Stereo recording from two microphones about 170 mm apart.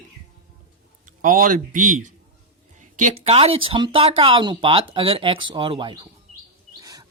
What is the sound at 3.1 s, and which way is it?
Speech, 35° right (ahead or behind).